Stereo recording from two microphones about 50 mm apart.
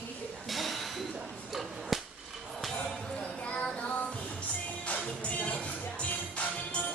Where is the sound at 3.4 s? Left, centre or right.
Left.